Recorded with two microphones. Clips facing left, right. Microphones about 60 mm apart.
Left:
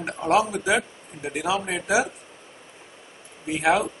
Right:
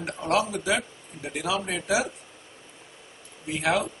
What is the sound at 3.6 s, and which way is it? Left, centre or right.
Speech, centre.